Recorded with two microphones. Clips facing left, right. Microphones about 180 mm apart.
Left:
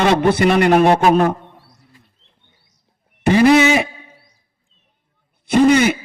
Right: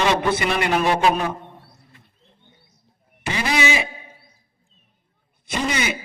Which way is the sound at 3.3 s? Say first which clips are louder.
Left 11 dB; 50° left (ahead or behind).